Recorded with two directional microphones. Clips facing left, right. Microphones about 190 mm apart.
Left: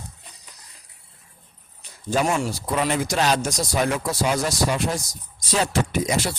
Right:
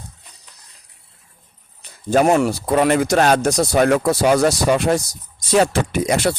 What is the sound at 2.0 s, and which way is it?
Speech, 60° right (ahead or behind).